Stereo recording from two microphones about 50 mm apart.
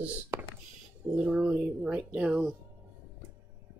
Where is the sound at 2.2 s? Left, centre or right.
Centre.